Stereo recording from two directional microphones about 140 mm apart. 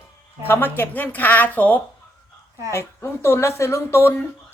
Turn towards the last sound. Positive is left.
turn(degrees=20)  # may be behind; listen again after turning